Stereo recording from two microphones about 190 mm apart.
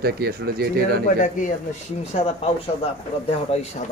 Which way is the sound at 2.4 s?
30° left (ahead or behind).